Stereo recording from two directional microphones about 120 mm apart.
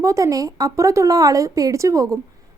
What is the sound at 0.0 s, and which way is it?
A woman's voice, 25° right (ahead or behind).